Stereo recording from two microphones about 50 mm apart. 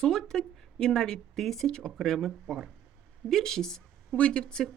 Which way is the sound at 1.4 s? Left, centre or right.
Centre.